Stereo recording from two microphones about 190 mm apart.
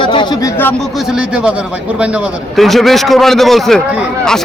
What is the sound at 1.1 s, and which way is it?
A man's voice, 5° right (ahead or behind).